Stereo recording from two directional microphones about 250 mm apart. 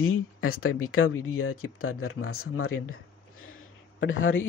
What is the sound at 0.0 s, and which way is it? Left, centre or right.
Speech, left.